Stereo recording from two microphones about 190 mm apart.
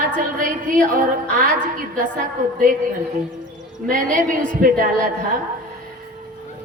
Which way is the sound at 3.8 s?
45° right (ahead or behind).